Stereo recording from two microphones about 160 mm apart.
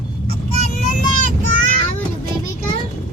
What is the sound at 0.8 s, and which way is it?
Vehicle, 55° left (ahead or behind).